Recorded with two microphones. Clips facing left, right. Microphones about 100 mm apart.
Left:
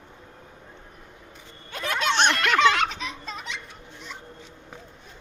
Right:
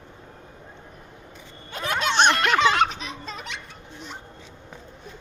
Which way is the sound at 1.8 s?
35° right (ahead or behind).